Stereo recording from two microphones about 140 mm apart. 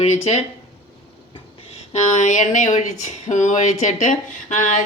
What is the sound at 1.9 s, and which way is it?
Speech, 60° left (ahead or behind).